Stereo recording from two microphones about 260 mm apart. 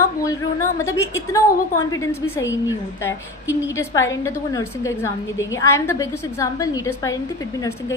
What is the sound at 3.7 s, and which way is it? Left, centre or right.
A woman's voice, centre.